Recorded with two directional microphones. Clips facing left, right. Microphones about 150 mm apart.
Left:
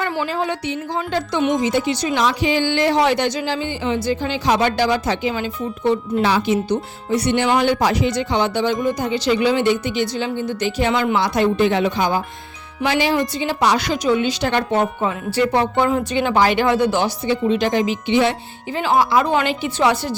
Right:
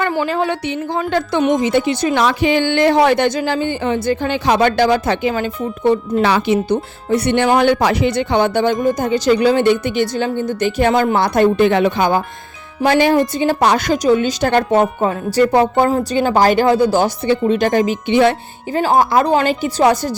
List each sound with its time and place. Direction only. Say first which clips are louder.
0.0 s a woman's voice: right 4 dB; 60° right (ahead or behind); by 17.1 s 35° right (ahead or behind)
17.2 s speech: right 3 dB; 50° right (ahead or behind)